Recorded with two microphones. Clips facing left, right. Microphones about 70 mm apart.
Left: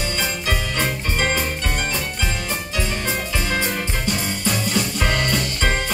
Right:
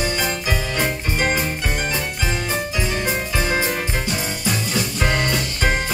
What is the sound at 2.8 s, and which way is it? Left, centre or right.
Music, centre.